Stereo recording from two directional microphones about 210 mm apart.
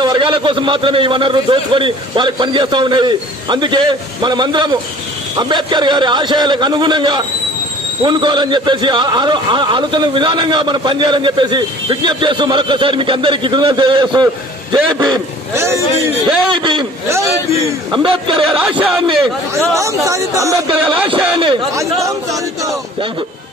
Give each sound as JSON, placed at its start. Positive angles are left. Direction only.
{"t": 0.0, "sound": "a man's voice", "side_deg": -20}
{"t": 16.4, "sound": "a man's voice", "side_deg": -25}
{"t": 18.6, "sound": "a man's voice", "side_deg": -5}